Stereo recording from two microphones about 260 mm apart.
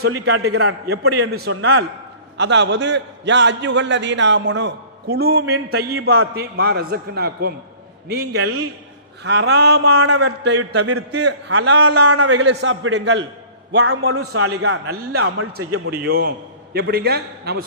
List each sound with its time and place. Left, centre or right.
0.3 s a man's voice: right
1.3 s a man's voice: right
8.4 s a man's voice: right
9.2 s a man's voice: right
9.9 s a man's voice: right
10.2 s a man's voice: right
10.8 s a man's voice: right
11.1 s a man's voice: right
12.0 s a man's voice: right
12.3 s a man's voice: right
13.7 s a man's voice: right
15.9 s a man's voice: right